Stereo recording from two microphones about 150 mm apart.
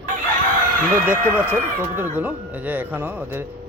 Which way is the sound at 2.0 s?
10° right (ahead or behind).